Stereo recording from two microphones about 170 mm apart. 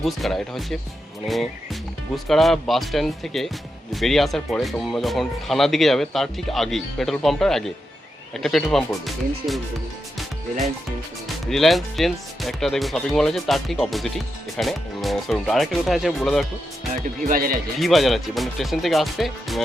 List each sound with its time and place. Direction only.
0.0 s speech: centre (ahead or behind)
11.4 s speech: centre (ahead or behind)
17.2 s speech: 55° right (ahead or behind)
17.7 s speech: centre (ahead or behind)